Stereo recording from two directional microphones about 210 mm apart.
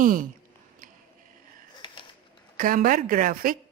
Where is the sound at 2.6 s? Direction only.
40° right (ahead or behind).